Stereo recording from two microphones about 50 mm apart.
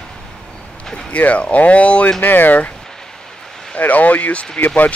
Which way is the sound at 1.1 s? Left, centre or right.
Left.